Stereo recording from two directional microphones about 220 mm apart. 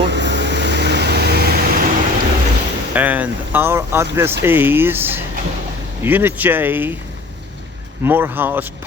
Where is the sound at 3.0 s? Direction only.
5° right (ahead or behind).